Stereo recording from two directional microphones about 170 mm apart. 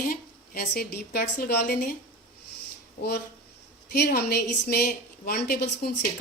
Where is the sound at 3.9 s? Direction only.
70° left (ahead or behind).